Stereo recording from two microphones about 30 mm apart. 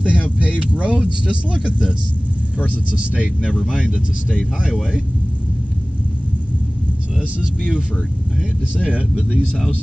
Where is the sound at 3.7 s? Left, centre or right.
Right.